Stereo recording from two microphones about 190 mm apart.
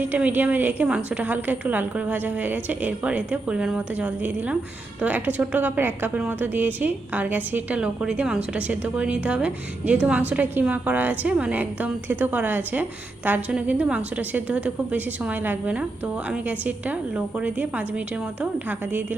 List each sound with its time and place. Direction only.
0.0 s a woman's voice: 10° right (ahead or behind)